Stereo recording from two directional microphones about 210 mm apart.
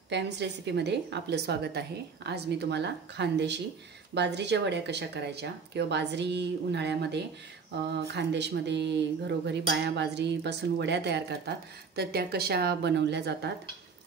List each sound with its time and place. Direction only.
0.1 s speech: 55° right (ahead or behind)